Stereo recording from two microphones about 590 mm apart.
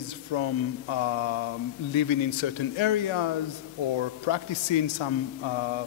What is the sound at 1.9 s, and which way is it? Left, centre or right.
A man's voice, left.